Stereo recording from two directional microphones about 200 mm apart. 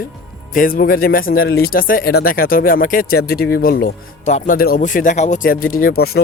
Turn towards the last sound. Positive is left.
turn(degrees=50)  # may be behind; listen again after turning